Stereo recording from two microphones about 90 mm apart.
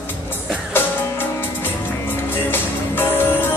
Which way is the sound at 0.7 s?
25° left (ahead or behind).